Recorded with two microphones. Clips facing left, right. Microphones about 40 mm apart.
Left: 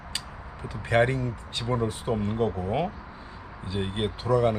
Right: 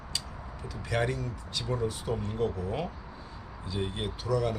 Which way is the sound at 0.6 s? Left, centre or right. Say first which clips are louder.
Left 7 dB; left.